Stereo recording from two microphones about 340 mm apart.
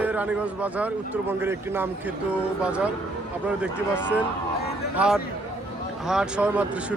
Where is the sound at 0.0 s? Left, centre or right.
Centre.